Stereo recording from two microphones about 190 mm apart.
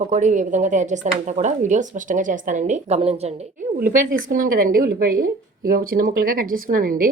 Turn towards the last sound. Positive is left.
turn(degrees=-45)  # may be behind; listen again after turning